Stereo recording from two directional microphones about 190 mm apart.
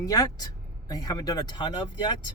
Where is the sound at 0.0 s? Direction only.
20° left (ahead or behind).